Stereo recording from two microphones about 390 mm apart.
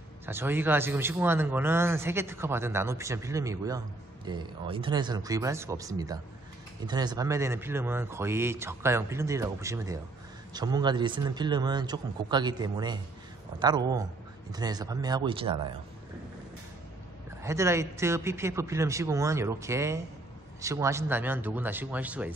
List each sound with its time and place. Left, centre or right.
0.3 s speech: centre
17.4 s speech: centre